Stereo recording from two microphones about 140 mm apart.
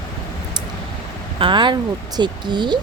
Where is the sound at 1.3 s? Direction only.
35° right (ahead or behind).